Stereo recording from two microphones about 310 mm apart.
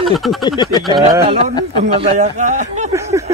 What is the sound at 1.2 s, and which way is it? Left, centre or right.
A man's voice, centre.